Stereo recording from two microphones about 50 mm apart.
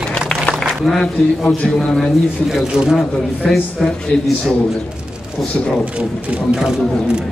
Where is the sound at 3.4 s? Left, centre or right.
Centre.